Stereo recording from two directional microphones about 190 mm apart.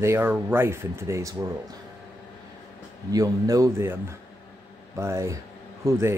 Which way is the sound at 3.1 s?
20° right (ahead or behind).